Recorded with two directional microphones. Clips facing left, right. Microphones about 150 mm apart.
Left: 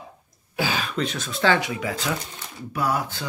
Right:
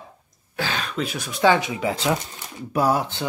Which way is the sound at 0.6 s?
5° left (ahead or behind).